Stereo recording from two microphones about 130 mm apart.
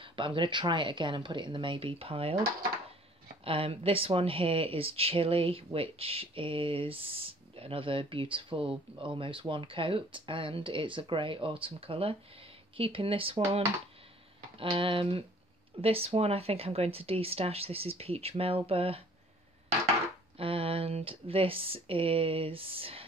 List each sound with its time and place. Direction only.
0.0 s speech: 40° right (ahead or behind)
3.4 s speech: 45° right (ahead or behind)
14.6 s speech: 45° right (ahead or behind)
20.3 s speech: 45° right (ahead or behind)